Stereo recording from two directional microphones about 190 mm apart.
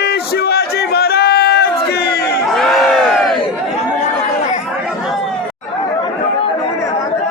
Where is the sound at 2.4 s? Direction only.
Centre (ahead or behind).